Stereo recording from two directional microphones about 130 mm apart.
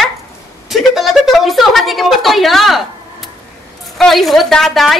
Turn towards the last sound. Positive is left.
turn(degrees=0)  # may be behind; listen again after turning